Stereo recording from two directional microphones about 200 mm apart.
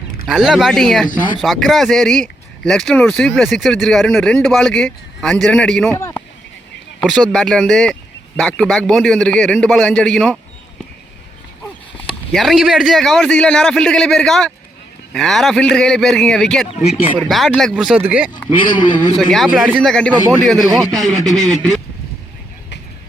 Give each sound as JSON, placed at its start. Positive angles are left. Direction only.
{"t": 0.3, "sound": "speech", "side_deg": -5}
{"t": 7.0, "sound": "speech", "side_deg": 0}
{"t": 12.0, "sound": "speech", "side_deg": 0}
{"t": 16.6, "sound": "speech", "side_deg": 30}
{"t": 17.2, "sound": "speech", "side_deg": 0}
{"t": 18.7, "sound": "a man's voice", "side_deg": 25}
{"t": 19.1, "sound": "speech", "side_deg": 0}